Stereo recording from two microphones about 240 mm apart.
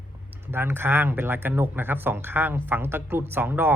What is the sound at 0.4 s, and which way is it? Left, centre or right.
Speech, centre.